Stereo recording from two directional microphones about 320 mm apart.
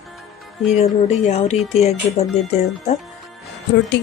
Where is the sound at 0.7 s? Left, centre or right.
Centre.